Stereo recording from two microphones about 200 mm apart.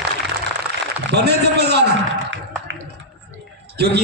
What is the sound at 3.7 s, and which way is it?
Speech, 55° right (ahead or behind).